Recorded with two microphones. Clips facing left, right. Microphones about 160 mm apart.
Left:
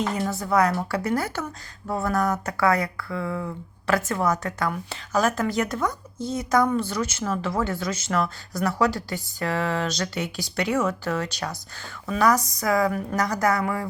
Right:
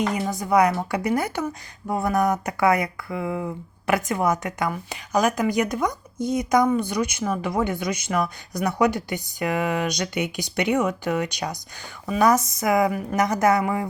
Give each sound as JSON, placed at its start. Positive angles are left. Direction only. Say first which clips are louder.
{"t": 0.3, "sound": "speech", "louder": "right 3 dB", "side_deg": -15}